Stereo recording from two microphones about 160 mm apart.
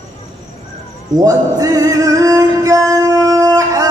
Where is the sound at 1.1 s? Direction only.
20° right (ahead or behind).